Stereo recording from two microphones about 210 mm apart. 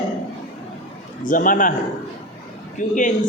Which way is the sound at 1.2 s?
40° left (ahead or behind).